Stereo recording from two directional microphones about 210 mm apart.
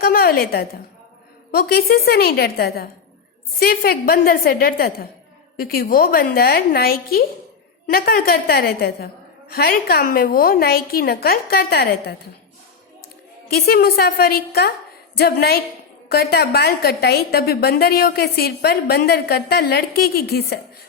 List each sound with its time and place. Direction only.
0.0 s a woman's voice: 45° left (ahead or behind)
13.5 s a woman's voice: 45° left (ahead or behind)